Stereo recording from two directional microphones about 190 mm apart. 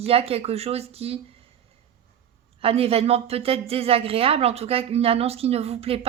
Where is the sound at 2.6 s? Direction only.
30° right (ahead or behind).